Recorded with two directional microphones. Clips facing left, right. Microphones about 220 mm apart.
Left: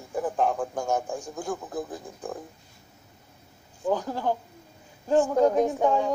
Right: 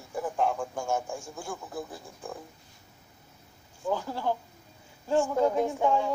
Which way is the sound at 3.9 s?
15° left (ahead or behind).